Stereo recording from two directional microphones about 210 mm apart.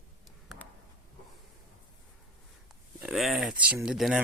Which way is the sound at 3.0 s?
Centre (ahead or behind).